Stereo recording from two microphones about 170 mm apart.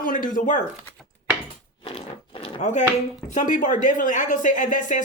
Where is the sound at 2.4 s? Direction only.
45° left (ahead or behind).